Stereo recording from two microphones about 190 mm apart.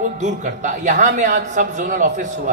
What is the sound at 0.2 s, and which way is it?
A man's voice, 40° right (ahead or behind).